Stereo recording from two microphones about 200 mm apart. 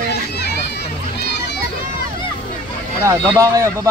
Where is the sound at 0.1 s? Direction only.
55° left (ahead or behind).